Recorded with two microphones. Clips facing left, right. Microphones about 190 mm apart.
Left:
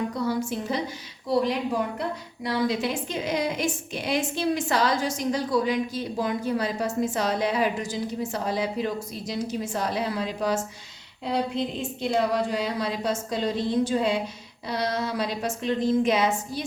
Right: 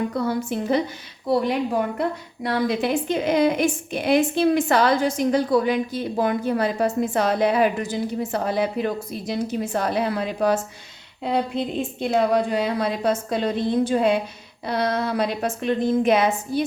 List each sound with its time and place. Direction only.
0.1 s a woman's voice: 55° right (ahead or behind)